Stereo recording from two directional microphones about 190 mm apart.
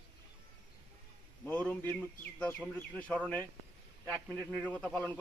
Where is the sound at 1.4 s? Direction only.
10° left (ahead or behind).